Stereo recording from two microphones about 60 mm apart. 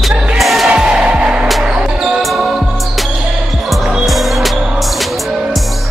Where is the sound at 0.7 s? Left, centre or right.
Centre.